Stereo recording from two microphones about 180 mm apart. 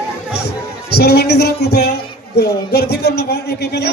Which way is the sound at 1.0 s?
65° left (ahead or behind).